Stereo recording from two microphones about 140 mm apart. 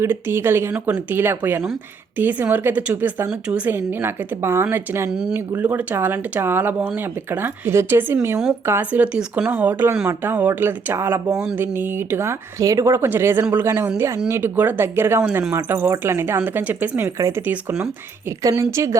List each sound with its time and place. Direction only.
0.0 s a woman's voice: 15° right (ahead or behind)